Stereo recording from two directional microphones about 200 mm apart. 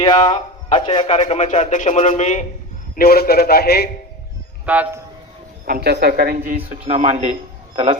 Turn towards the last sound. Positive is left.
turn(degrees=-30)  # may be behind; listen again after turning